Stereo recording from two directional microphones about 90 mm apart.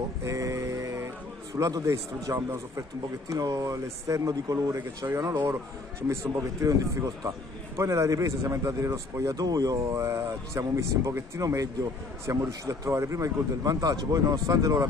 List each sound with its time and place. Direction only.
0.2 s music: 35° right (ahead or behind)
3.3 s speech: 40° right (ahead or behind)